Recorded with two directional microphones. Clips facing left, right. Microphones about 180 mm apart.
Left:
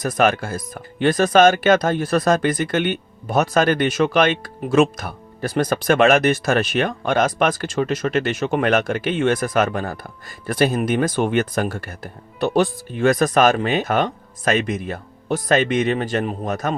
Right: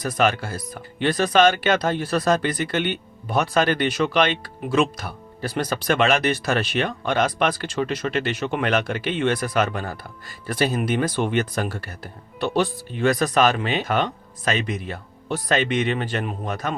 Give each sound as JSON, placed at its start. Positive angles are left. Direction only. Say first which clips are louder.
{"t": 0.0, "sound": "speech", "louder": "left 3 dB", "side_deg": 50}